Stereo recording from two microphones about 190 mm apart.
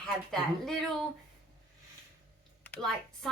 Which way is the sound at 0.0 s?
Centre (ahead or behind).